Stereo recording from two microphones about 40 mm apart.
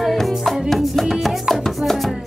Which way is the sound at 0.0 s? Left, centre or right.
Centre.